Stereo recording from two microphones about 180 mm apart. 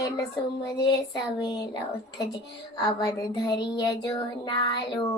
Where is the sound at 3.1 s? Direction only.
20° left (ahead or behind).